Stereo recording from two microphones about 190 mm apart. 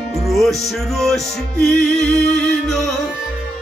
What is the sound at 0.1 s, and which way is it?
Music, centre (ahead or behind).